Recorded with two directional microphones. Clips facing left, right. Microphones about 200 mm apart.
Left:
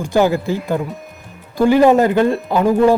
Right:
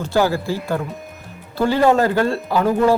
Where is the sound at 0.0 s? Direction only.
15° left (ahead or behind).